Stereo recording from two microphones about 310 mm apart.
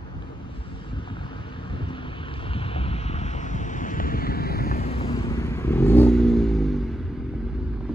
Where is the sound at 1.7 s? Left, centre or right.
Centre.